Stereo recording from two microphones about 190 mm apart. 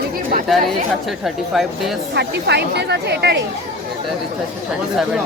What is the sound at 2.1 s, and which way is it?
Speech, 60° right (ahead or behind).